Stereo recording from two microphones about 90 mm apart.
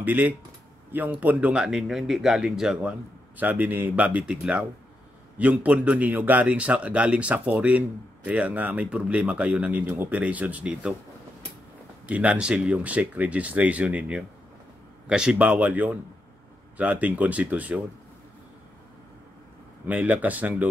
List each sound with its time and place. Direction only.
0.0 s a man's voice: 20° right (ahead or behind)
2.8 s a man's voice: 15° right (ahead or behind)
10.7 s speech: 5° right (ahead or behind)
12.1 s a man's voice: 15° right (ahead or behind)
19.9 s a man's voice: 15° right (ahead or behind)